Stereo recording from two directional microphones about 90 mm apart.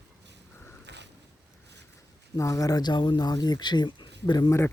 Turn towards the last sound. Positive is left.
turn(degrees=50)  # may be behind; listen again after turning